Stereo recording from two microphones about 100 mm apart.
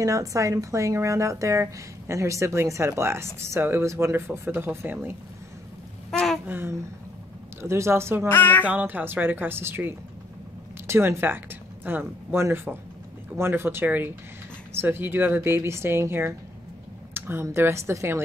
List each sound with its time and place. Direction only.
0.0 s speech: 30° right (ahead or behind)
6.1 s a sound: centre (ahead or behind)
6.4 s a sound: 20° right (ahead or behind)
7.6 s speech: 30° right (ahead or behind)
8.3 s speech: 20° left (ahead or behind)
8.6 s speech: 15° right (ahead or behind)